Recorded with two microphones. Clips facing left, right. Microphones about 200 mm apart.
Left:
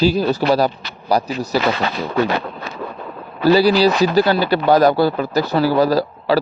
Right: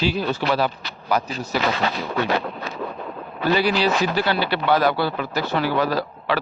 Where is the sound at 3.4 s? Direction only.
35° left (ahead or behind).